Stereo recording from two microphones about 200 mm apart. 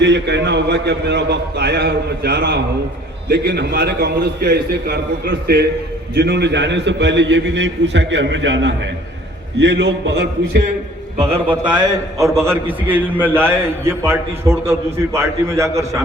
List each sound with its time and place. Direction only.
0.0 s a man's voice: 60° right (ahead or behind)
11.2 s a man's voice: 25° right (ahead or behind)